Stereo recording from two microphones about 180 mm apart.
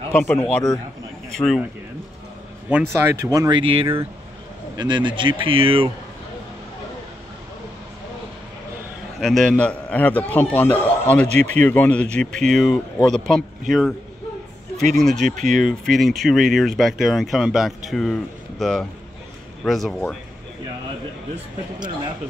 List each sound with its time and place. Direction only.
0.1 s speech: 5° left (ahead or behind)
2.7 s speech: 15° right (ahead or behind); by 5.9 s 30° right (ahead or behind)
9.2 s a man's voice: centre (ahead or behind)
15.0 s speech: centre (ahead or behind)
15.2 s speech: 45° right (ahead or behind)
15.7 s speech: centre (ahead or behind)
21.7 s speech: 25° right (ahead or behind)